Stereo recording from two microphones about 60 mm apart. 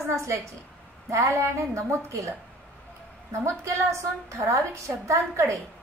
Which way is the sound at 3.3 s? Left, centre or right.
Right.